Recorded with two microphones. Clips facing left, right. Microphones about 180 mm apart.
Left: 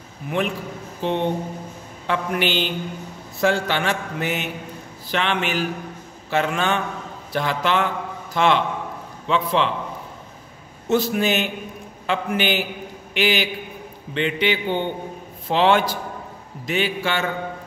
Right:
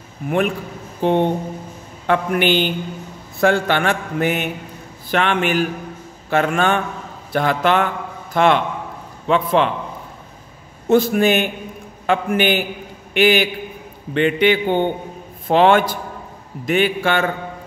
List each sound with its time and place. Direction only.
0.2 s a man's voice: 50° right (ahead or behind)
10.9 s a man's voice: 50° right (ahead or behind)